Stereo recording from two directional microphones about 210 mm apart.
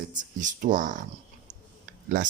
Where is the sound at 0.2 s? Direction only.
35° right (ahead or behind).